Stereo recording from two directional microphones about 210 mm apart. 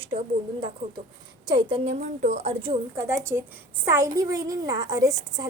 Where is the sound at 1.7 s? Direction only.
30° right (ahead or behind).